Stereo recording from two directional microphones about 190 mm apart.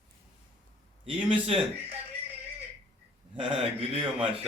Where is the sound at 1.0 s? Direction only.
30° right (ahead or behind).